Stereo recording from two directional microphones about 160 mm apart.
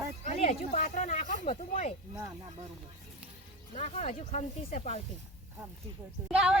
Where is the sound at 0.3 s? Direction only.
45° left (ahead or behind).